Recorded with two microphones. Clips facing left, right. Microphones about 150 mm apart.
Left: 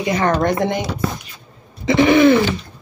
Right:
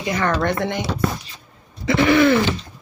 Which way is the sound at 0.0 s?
25° left (ahead or behind).